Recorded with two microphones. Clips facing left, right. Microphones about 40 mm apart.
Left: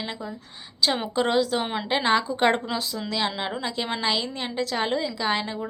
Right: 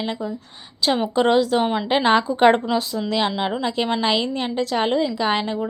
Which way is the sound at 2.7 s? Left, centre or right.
Centre.